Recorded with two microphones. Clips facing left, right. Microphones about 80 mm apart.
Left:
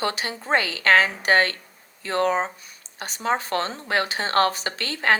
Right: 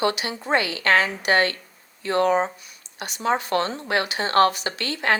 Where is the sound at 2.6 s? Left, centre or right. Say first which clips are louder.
Right 1 dB; left.